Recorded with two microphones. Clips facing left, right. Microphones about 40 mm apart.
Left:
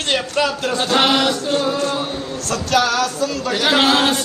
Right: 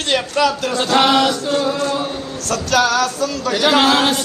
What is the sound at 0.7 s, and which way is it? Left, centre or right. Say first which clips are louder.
Chant: right 1 dB; right.